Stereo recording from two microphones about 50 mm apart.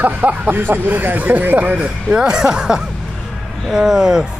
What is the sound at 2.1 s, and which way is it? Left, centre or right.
Speech, centre.